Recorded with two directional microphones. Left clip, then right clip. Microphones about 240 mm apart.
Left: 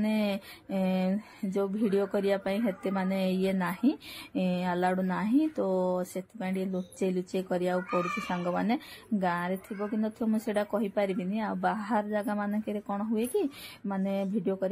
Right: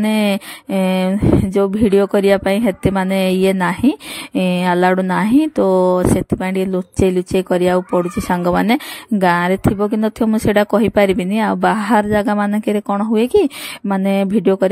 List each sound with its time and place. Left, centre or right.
0.0 s speech: right